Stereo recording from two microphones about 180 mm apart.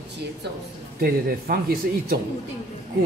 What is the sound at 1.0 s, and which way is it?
Speech, 55° right (ahead or behind).